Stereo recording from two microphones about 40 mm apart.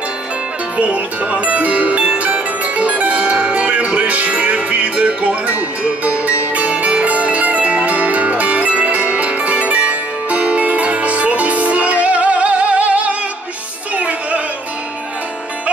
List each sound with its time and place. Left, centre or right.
0.7 s speech: right
2.0 s music: right
9.0 s zither: right
13.9 s music: right